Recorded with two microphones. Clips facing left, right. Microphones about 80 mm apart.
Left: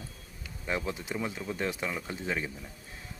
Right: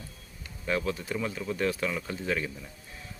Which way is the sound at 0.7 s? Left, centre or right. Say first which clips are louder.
Right 3 dB; left.